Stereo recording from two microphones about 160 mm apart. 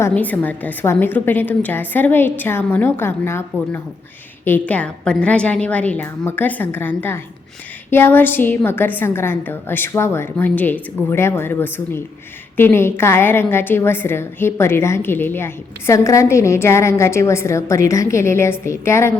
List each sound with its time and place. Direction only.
0.0 s a woman's voice: 10° left (ahead or behind)
4.4 s a woman's voice: 10° left (ahead or behind)